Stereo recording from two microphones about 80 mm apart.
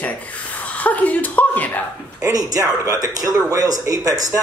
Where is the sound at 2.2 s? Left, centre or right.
Right.